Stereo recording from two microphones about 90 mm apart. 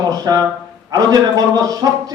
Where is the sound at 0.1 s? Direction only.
45° right (ahead or behind).